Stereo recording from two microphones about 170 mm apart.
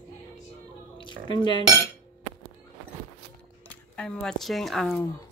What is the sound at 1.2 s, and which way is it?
Dishes, 30° left (ahead or behind).